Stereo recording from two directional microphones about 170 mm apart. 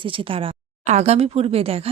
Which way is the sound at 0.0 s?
30° right (ahead or behind).